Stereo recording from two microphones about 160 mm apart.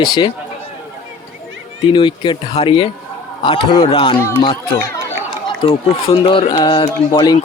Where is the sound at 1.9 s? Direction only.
30° left (ahead or behind).